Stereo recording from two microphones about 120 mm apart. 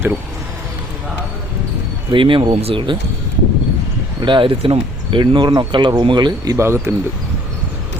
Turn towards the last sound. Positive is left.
turn(degrees=-20)  # may be behind; listen again after turning